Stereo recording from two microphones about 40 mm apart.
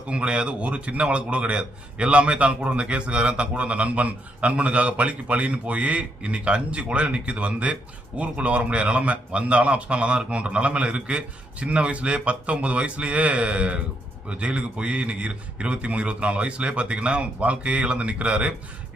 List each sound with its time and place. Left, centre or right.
0.1 s a man's voice: right